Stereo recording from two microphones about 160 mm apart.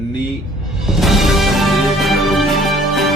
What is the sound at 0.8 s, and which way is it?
Music, centre (ahead or behind).